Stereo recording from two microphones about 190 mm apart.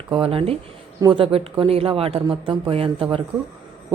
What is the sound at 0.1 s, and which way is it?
A woman's voice, 30° right (ahead or behind).